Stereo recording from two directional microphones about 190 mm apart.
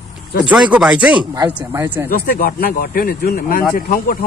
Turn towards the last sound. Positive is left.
turn(degrees=45)  # may be behind; listen again after turning